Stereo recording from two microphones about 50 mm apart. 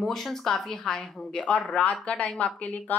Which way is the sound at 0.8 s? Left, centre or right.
Centre.